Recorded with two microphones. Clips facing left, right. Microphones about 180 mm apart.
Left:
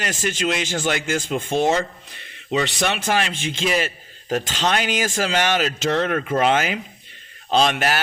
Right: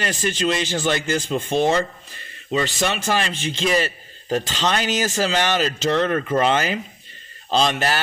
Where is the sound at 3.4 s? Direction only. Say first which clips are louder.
Right 1 dB; 10° left (ahead or behind).